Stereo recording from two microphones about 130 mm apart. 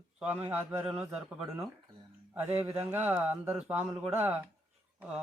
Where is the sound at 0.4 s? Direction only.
15° right (ahead or behind).